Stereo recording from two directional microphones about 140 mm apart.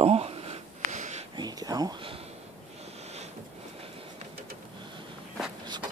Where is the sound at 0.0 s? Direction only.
45° right (ahead or behind).